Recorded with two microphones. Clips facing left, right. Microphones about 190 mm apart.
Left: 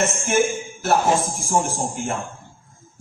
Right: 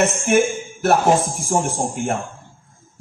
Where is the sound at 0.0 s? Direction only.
60° right (ahead or behind).